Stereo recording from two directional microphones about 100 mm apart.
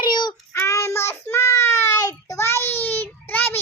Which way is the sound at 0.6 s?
25° left (ahead or behind).